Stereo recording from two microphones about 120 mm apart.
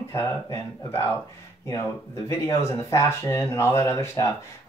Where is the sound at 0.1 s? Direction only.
25° left (ahead or behind).